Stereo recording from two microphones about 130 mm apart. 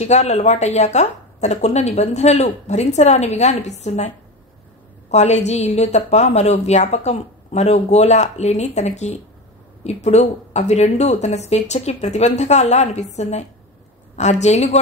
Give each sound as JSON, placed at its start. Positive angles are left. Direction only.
{"t": 0.0, "sound": "a woman's voice", "side_deg": 60}
{"t": 5.1, "sound": "a woman's voice", "side_deg": 60}